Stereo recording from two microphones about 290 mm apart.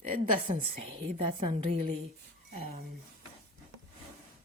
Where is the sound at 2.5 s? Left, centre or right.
Right.